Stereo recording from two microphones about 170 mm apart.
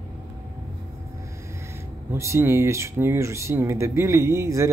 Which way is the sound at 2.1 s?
15° right (ahead or behind).